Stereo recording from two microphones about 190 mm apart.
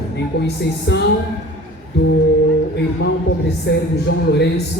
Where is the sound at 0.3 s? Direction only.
60° left (ahead or behind).